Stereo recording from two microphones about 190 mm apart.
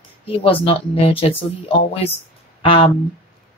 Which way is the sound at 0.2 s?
30° left (ahead or behind).